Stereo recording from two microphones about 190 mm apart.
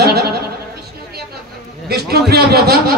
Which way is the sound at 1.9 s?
55° right (ahead or behind).